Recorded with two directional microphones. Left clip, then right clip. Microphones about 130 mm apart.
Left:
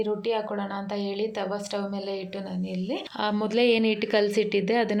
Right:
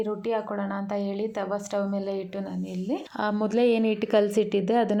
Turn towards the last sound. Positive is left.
turn(degrees=-50)  # may be behind; listen again after turning